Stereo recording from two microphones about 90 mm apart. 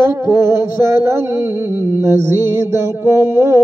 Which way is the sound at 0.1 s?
25° right (ahead or behind).